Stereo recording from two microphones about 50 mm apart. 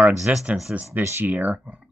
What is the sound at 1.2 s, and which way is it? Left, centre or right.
Speech, right.